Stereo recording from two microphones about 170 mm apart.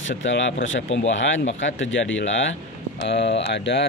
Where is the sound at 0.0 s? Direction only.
90° left.